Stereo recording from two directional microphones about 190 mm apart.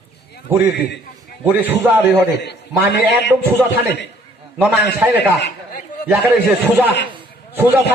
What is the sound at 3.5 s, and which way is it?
A man's voice, 10° right (ahead or behind).